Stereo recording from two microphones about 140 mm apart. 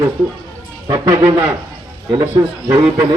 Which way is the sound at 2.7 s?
25° right (ahead or behind).